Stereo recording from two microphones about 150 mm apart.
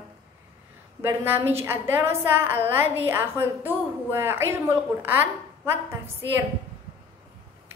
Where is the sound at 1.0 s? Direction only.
15° right (ahead or behind).